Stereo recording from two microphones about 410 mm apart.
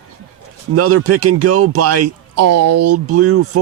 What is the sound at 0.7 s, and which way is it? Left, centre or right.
Speech, right.